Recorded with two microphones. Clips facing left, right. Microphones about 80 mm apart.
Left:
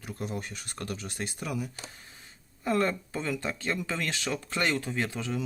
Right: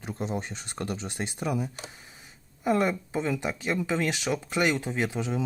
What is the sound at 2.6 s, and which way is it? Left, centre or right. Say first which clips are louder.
Speech: right 2 dB; centre.